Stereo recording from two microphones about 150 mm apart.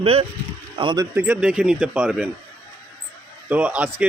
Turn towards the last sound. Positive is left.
turn(degrees=-10)  # may be behind; listen again after turning